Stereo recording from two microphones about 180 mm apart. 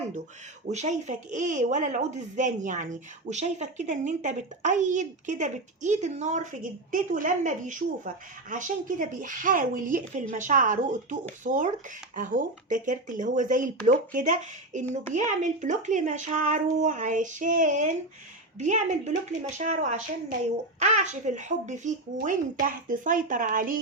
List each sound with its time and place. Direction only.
0.7 s a woman's voice: 40° right (ahead or behind)